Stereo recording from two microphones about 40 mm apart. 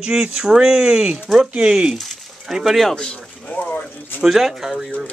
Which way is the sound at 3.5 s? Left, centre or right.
Left.